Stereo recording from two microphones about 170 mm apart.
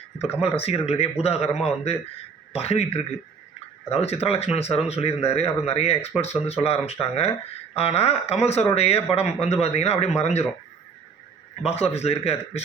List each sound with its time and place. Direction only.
0.5 s speech: 35° left (ahead or behind)
11.6 s speech: 40° left (ahead or behind)